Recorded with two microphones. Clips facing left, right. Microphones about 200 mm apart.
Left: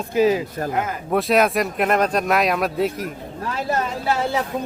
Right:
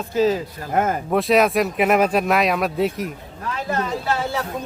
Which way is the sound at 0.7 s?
50° right (ahead or behind).